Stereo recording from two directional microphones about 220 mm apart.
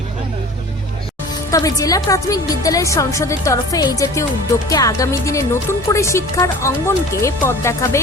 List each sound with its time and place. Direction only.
1.5 s speech: 15° left (ahead or behind)